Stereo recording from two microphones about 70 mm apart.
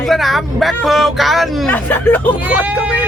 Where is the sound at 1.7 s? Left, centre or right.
Left.